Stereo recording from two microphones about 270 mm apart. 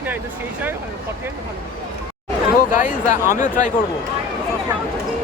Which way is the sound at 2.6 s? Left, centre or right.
Left.